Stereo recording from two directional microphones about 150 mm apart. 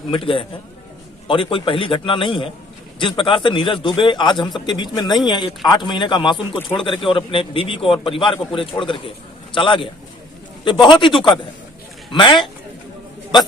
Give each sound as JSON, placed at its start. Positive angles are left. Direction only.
{"t": 0.1, "sound": "a man's voice", "side_deg": 35}